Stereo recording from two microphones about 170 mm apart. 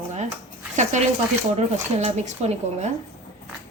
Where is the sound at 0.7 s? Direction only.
45° right (ahead or behind).